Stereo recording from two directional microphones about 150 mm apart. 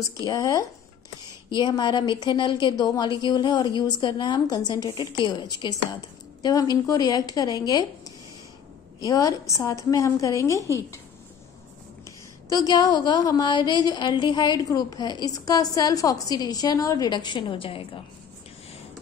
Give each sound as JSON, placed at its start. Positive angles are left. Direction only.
{"t": 0.2, "sound": "a woman's voice", "side_deg": 20}
{"t": 9.0, "sound": "a woman's voice", "side_deg": 20}
{"t": 12.4, "sound": "a woman's voice", "side_deg": 25}